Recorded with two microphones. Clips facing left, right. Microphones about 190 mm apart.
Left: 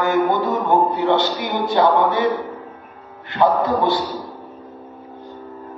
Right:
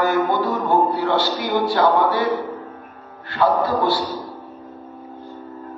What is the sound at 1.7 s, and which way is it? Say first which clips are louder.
Speech: left 3 dB; 20° left (ahead or behind).